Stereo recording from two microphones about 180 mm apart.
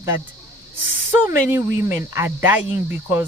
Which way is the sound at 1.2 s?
15° right (ahead or behind).